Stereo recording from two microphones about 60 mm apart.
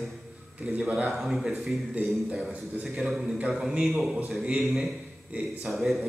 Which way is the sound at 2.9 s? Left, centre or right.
Centre.